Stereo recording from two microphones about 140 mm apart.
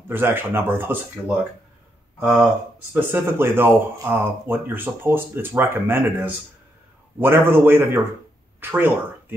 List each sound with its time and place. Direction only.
0.1 s speech: 15° right (ahead or behind)
2.1 s speech: 10° right (ahead or behind)